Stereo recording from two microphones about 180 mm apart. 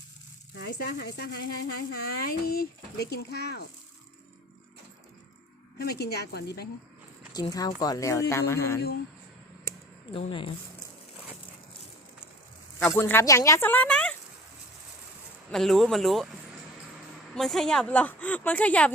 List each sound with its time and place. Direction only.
0.6 s speech: 65° left (ahead or behind)
5.8 s speech: 65° left (ahead or behind)
7.3 s a woman's voice: 20° left (ahead or behind)
10.1 s speech: 30° left (ahead or behind)
12.9 s a woman's voice: 15° left (ahead or behind)
15.4 s speech: centre (ahead or behind)
17.3 s a woman's voice: centre (ahead or behind)